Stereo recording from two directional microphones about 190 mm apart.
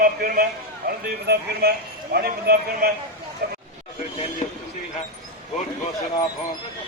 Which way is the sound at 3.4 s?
55° right (ahead or behind).